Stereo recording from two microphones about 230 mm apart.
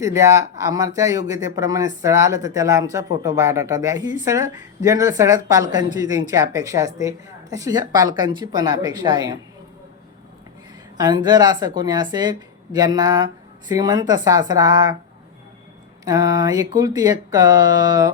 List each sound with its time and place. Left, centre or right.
0.0 s speech: centre
10.9 s speech: centre
16.0 s speech: centre